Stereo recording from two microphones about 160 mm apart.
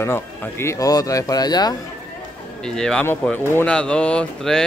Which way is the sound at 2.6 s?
5° left (ahead or behind).